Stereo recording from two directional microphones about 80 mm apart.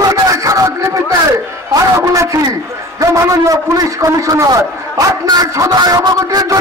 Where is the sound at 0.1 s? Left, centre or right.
Right.